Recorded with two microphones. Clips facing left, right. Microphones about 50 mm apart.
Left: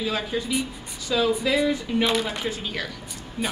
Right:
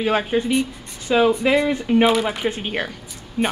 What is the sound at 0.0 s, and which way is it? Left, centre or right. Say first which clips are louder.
A woman's voice: right 7 dB; right.